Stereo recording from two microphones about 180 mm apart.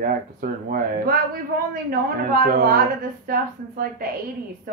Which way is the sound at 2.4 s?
50° right (ahead or behind).